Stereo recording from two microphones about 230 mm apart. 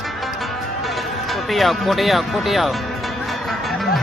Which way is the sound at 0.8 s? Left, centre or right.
Centre.